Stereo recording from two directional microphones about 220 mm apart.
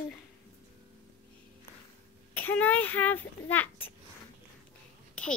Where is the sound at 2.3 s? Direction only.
10° left (ahead or behind).